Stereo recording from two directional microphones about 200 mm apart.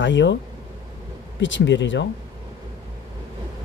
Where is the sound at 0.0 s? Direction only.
65° left (ahead or behind).